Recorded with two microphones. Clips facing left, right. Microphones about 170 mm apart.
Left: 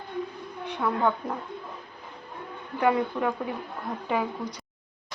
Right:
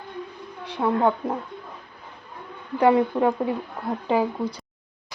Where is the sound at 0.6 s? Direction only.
30° right (ahead or behind).